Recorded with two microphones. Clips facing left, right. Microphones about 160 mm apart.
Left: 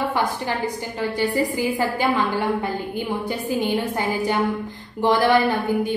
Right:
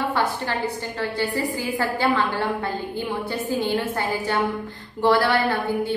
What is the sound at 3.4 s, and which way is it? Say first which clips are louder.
A woman's voice: left 1 dB; 15° left (ahead or behind).